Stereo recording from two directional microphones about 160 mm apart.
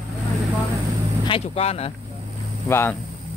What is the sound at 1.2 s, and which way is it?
Speech, 35° left (ahead or behind).